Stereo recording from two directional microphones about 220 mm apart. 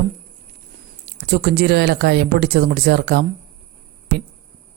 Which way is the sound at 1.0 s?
45° right (ahead or behind).